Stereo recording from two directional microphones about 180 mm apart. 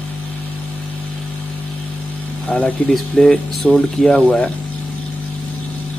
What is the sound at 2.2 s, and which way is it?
Speech, 10° left (ahead or behind).